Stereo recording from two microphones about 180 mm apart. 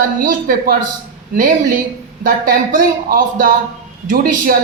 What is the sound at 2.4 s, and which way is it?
A woman's voice, 50° right (ahead or behind).